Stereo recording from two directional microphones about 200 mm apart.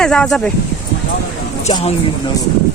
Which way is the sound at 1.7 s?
25° left (ahead or behind).